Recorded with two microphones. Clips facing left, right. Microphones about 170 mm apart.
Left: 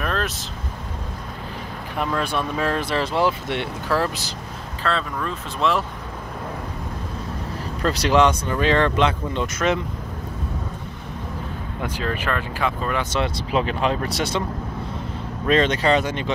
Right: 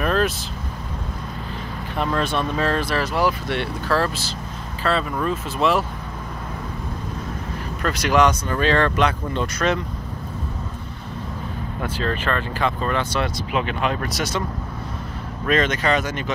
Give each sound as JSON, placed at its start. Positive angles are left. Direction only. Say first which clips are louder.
{"t": 0.0, "sound": "vehicle", "louder": "right 5 dB", "side_deg": 0}
{"t": 2.0, "sound": "speech", "louder": "right 1 dB", "side_deg": 10}
{"t": 4.8, "sound": "speech", "louder": "right 3 dB", "side_deg": -5}
{"t": 7.8, "sound": "speech", "louder": "left 1 dB", "side_deg": 30}
{"t": 11.8, "sound": "speech", "louder": "right 1 dB", "side_deg": 15}
{"t": 13.5, "sound": "speech", "louder": "left 4 dB", "side_deg": 30}
{"t": 15.4, "sound": "speech", "louder": "left 2 dB", "side_deg": 30}